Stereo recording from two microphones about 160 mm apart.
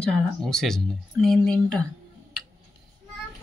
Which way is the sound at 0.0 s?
5° left (ahead or behind).